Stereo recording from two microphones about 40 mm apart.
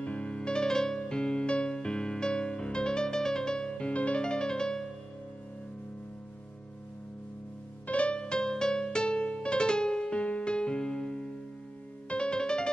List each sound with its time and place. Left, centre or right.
0.0 s music: left; by 4.8 s centre
7.8 s music: left
8.2 s music: centre